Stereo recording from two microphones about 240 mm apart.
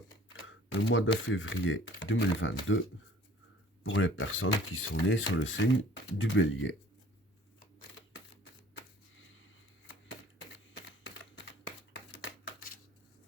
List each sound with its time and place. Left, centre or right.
0.3 s camera: left
1.3 s speech: left
3.8 s speech: left